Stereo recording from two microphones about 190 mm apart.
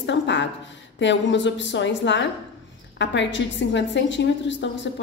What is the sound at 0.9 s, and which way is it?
A woman's voice, 70° left (ahead or behind).